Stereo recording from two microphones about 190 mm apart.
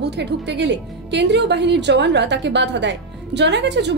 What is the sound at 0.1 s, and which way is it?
A woman's voice, 65° right (ahead or behind).